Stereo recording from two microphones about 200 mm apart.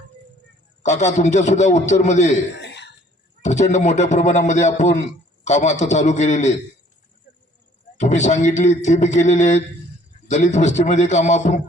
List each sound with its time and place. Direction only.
0.8 s a man's voice: 35° left (ahead or behind)
2.6 s throat clearing: 60° left (ahead or behind)
3.4 s a man's voice: 35° left (ahead or behind)
8.0 s a man's voice: 35° left (ahead or behind)